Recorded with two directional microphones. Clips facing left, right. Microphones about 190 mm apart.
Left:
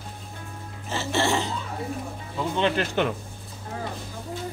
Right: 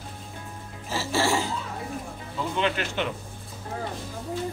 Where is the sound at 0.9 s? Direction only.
5° right (ahead or behind).